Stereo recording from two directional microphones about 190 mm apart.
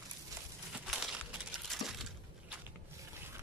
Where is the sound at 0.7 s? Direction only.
5° right (ahead or behind).